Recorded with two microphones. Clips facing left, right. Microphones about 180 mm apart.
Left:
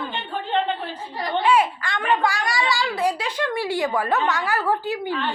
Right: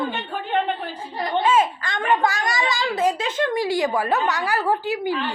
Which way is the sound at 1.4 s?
20° right (ahead or behind).